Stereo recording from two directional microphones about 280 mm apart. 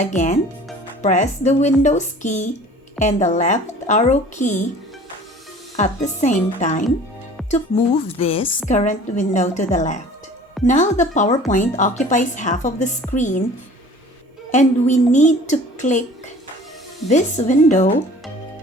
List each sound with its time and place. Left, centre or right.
0.0 s a woman's voice: left
5.7 s a woman's voice: left
14.5 s a woman's voice: left
17.1 s a woman's voice: left